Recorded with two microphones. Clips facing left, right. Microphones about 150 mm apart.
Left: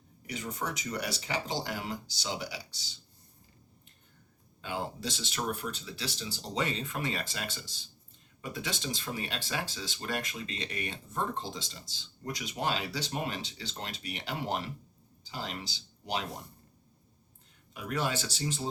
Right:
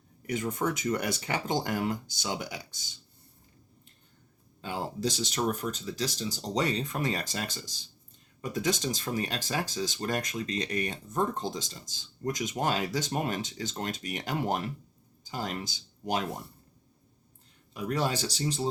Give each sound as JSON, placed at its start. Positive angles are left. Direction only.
{"t": 0.3, "sound": "speech", "side_deg": -50}
{"t": 4.6, "sound": "speech", "side_deg": -40}
{"t": 17.7, "sound": "speech", "side_deg": -35}